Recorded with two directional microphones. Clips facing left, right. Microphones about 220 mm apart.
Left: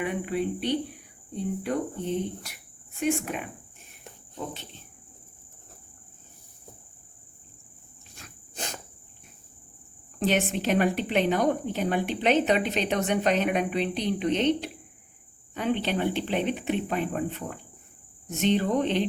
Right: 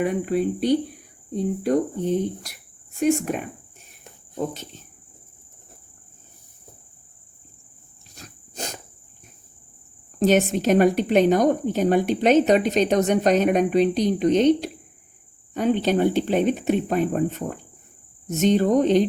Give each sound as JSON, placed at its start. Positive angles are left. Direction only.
{"t": 0.0, "sound": "a woman's voice", "side_deg": -40}
{"t": 8.1, "sound": "dog", "side_deg": -40}
{"t": 10.2, "sound": "a woman's voice", "side_deg": -40}